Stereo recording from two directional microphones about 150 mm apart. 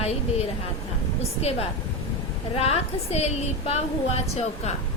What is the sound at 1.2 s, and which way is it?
A woman's voice, 45° left (ahead or behind).